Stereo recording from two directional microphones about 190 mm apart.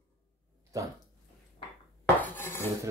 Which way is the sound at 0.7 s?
15° right (ahead or behind).